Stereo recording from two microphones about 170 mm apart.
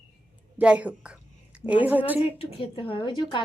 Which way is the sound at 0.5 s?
10° right (ahead or behind).